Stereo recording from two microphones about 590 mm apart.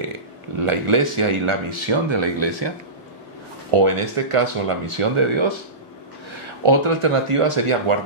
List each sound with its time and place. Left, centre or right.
0.7 s speech: right
3.7 s speech: right